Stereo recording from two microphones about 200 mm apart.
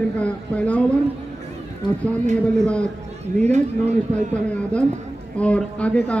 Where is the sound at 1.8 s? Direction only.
25° left (ahead or behind).